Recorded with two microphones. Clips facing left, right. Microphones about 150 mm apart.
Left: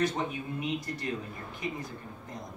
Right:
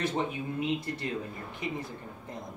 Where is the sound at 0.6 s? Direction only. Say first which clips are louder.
Right 3 dB; 25° right (ahead or behind).